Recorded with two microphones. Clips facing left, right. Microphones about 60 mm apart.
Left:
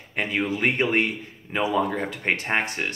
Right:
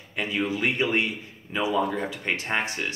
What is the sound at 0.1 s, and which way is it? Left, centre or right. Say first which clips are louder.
Speech: left 2 dB; left.